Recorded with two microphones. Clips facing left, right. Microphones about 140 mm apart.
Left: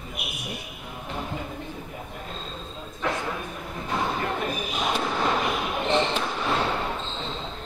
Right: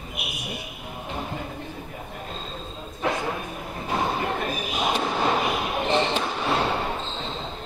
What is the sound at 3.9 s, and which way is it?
Thump, 20° right (ahead or behind).